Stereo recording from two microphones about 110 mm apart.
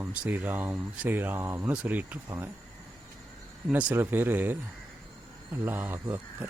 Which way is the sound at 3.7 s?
15° right (ahead or behind).